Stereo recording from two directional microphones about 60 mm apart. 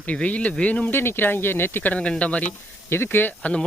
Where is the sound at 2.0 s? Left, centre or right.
Left.